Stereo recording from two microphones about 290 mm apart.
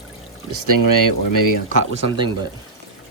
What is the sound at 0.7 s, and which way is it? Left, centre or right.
Speech, right.